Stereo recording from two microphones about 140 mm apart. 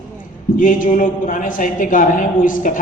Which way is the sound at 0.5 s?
75° left (ahead or behind).